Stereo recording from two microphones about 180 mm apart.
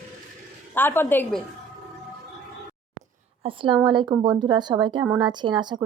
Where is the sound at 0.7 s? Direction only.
10° left (ahead or behind).